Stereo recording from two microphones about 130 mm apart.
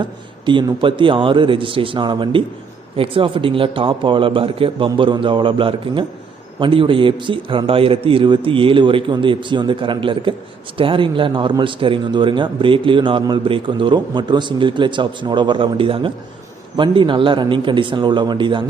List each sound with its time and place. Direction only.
0.0 s a man's voice: 40° right (ahead or behind)